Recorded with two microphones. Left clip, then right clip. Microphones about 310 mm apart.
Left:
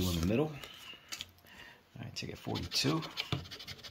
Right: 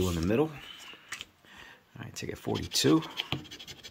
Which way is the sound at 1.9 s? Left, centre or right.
Centre.